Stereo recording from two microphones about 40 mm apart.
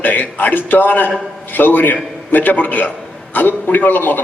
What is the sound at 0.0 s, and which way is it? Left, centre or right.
A man's voice, left.